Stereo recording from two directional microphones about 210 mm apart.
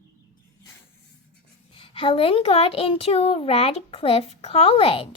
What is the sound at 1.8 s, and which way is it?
A child's voice, 25° left (ahead or behind).